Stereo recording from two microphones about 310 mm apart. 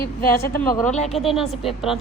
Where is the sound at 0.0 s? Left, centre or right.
Left.